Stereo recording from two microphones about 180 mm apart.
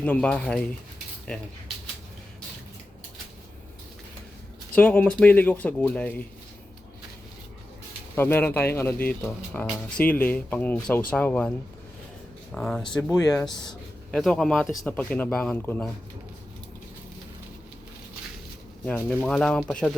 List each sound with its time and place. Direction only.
0.0 s speech: 5° left (ahead or behind)
4.7 s speech: 10° left (ahead or behind)
8.1 s speech: 10° left (ahead or behind)
13.5 s speech: 25° left (ahead or behind)
14.1 s speech: centre (ahead or behind)
18.9 s speech: 10° left (ahead or behind)